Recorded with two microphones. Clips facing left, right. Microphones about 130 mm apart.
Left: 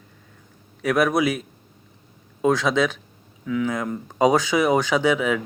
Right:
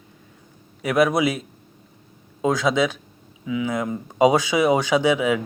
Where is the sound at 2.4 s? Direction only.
15° right (ahead or behind).